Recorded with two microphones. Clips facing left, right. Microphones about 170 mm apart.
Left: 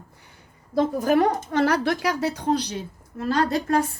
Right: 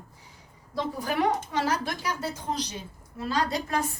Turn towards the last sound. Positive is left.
turn(degrees=55)  # may be behind; listen again after turning